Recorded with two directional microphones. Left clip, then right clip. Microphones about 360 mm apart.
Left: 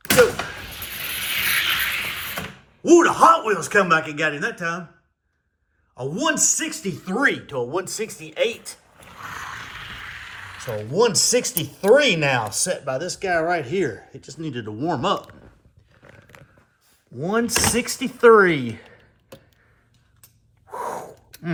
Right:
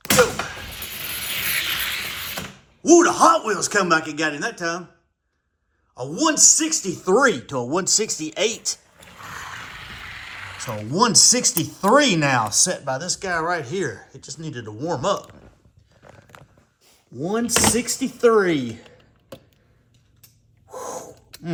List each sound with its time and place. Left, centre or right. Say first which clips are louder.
0.1 s a sound: left 1 dB; centre
2.8 s a man's voice: left 1 dB; centre
5.9 s a man's voice: right 1 dB; centre
8.6 s speech: right 11 dB; centre
16.0 s biting: right 1 dB; centre
17.6 s a man's voice: right 1 dB; centre
18.0 s speech: left 4 dB; centre
18.7 s a sound: left 1 dB; centre
20.7 s gasp: left 3 dB; centre
21.2 s a sound: right 3 dB; centre